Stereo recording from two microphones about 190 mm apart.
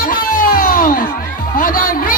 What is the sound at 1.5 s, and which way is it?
Music, 50° left (ahead or behind).